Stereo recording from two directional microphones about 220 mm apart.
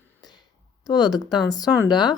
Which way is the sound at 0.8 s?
20° left (ahead or behind).